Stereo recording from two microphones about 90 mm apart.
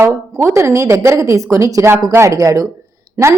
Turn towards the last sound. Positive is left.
turn(degrees=-30)  # may be behind; listen again after turning